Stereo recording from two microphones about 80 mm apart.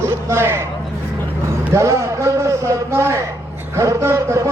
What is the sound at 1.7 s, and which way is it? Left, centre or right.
A man's voice, right.